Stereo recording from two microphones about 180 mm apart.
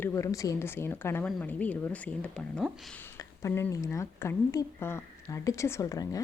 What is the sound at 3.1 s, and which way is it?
Speech, 15° left (ahead or behind).